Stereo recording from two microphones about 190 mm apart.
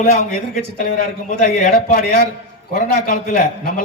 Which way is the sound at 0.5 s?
45° left (ahead or behind).